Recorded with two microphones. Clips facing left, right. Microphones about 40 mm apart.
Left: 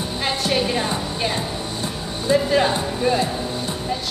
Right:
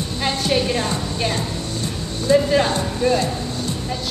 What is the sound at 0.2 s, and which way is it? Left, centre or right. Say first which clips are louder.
Music: right 2 dB; centre.